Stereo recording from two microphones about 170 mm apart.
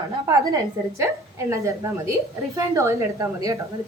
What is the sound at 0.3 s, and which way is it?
A woman's voice, 20° right (ahead or behind).